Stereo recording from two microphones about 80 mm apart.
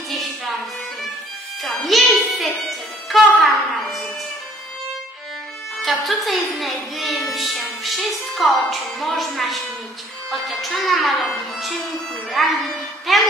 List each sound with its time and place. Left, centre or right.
0.1 s music: centre
1.6 s a woman's voice: centre
2.4 s music: centre
5.8 s speech: centre
7.3 s music: centre
8.6 s speech: centre